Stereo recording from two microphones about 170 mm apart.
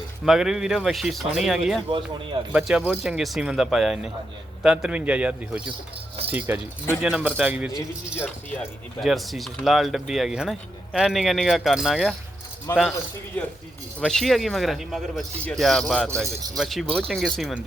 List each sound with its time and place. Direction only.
0.3 s speech: 5° right (ahead or behind)
1.9 s speech: 30° right (ahead or behind)
2.5 s a man's voice: 5° right (ahead or behind)
9.0 s speech: centre (ahead or behind)
12.7 s speech: 20° left (ahead or behind)
14.0 s speech: centre (ahead or behind)